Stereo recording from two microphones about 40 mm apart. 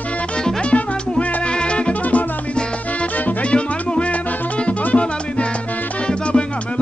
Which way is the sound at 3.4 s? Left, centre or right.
Left.